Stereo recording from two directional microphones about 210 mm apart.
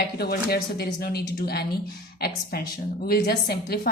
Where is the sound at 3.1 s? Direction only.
50° left (ahead or behind).